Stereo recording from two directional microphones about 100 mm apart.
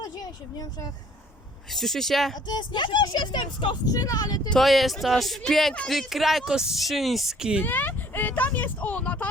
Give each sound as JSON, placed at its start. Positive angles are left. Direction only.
{"t": 1.7, "sound": "speech", "side_deg": 5}
{"t": 2.5, "sound": "speech", "side_deg": 50}
{"t": 4.4, "sound": "speech", "side_deg": 5}
{"t": 7.6, "sound": "speech", "side_deg": 20}